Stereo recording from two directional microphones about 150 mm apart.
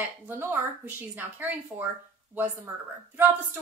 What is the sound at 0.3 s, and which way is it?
A woman's voice, 15° right (ahead or behind).